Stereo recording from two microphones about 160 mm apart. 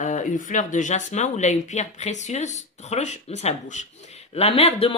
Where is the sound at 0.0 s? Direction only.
50° left (ahead or behind).